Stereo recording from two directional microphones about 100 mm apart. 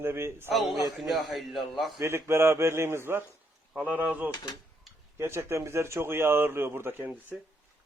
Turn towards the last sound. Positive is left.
turn(degrees=-20)  # may be behind; listen again after turning